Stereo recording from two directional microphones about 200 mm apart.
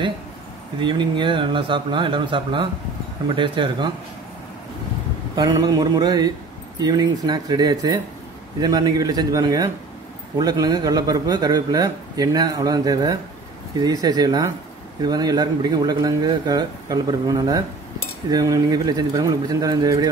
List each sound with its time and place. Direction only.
0.7 s a man's voice: 25° right (ahead or behind)
5.3 s a man's voice: 20° right (ahead or behind)